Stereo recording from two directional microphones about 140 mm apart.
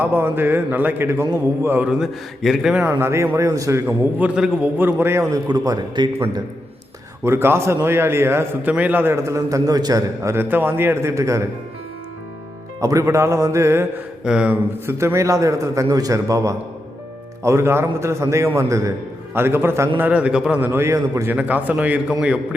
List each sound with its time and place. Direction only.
0.0 s a man's voice: 15° right (ahead or behind)
3.0 s a man's voice: 20° right (ahead or behind)
3.8 s a man's voice: 5° right (ahead or behind); by 6.1 s 30° right (ahead or behind)
7.3 s a man's voice: 15° right (ahead or behind)
12.8 s a man's voice: 25° right (ahead or behind)
14.3 s a man's voice: 5° right (ahead or behind)
14.8 s a man's voice: 20° right (ahead or behind)